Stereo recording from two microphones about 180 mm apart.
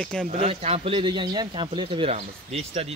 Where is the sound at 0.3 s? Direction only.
35° right (ahead or behind).